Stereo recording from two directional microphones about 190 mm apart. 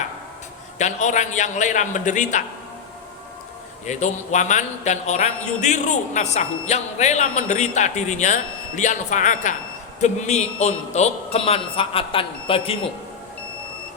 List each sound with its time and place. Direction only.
0.8 s a man's voice: 40° left (ahead or behind)
3.8 s a man's voice: 40° left (ahead or behind)